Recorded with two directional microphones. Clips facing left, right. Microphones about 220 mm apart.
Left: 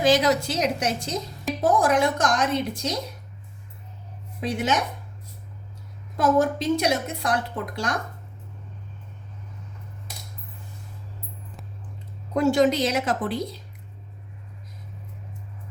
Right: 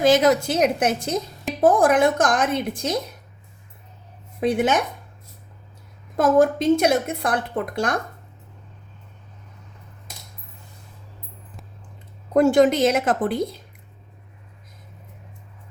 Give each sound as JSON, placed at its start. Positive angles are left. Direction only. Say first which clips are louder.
{"t": 0.0, "sound": "a woman's voice", "louder": "right 3 dB", "side_deg": -50}
{"t": 4.4, "sound": "a woman's voice", "louder": "right 5 dB", "side_deg": -55}
{"t": 6.1, "sound": "a woman's voice", "louder": "right 4 dB", "side_deg": -50}
{"t": 12.3, "sound": "a woman's voice", "louder": "right 4 dB", "side_deg": -50}